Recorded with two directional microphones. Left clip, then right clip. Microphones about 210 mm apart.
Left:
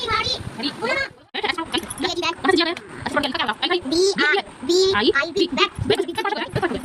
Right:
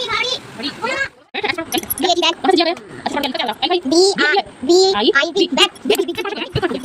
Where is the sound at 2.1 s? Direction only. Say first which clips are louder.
Right 10 dB; 20° right (ahead or behind).